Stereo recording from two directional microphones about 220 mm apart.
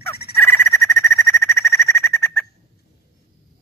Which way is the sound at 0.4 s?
10° left (ahead or behind).